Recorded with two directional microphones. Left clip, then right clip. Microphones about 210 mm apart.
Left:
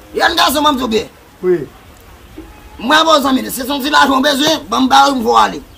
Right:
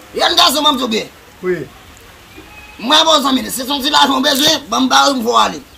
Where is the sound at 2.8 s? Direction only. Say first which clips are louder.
Left 1 dB; 5° left (ahead or behind).